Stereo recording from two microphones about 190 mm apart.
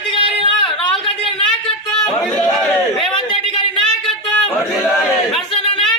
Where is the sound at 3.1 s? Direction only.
25° left (ahead or behind).